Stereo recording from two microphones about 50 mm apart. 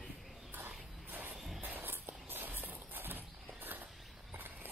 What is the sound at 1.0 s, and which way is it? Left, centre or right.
Music, right.